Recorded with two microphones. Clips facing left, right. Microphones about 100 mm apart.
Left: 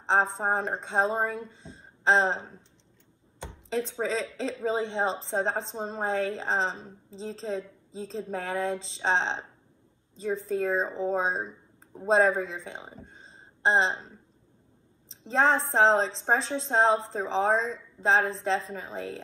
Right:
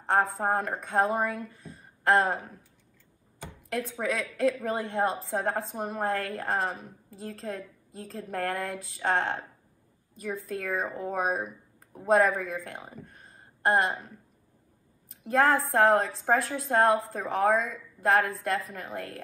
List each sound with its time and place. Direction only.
0.0 s a woman's voice: 20° left (ahead or behind)
15.2 s a woman's voice: 20° left (ahead or behind)